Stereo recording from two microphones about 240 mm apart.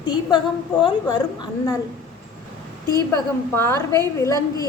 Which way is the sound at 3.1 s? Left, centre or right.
Centre.